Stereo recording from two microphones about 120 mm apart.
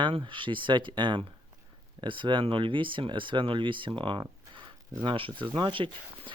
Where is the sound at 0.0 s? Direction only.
40° right (ahead or behind).